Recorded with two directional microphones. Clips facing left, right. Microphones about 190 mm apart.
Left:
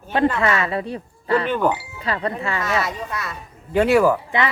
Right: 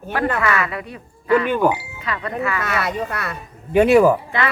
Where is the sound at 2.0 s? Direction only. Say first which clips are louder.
Even; 30° left (ahead or behind).